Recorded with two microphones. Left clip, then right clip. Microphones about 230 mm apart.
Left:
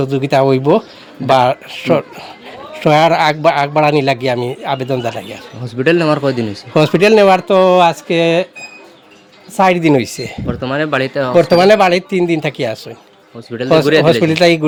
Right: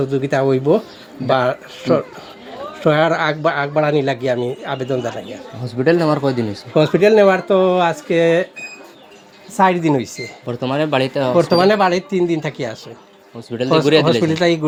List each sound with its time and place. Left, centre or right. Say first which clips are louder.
0.0 s a man's voice: left 5 dB; left
5.6 s speech: left 3 dB; left
6.7 s a man's voice: left 3 dB; left
9.6 s a man's voice: left 4 dB; left
10.4 s speech: left 1 dB; centre
11.3 s a man's voice: left 6 dB; left